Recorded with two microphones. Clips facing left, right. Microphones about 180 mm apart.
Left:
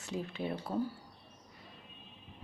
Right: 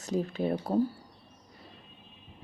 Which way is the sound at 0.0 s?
40° right (ahead or behind).